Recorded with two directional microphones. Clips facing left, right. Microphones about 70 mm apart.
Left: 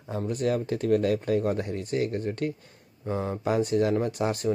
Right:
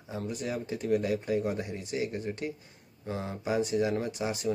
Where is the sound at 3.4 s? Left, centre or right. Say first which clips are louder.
Left 3 dB; left.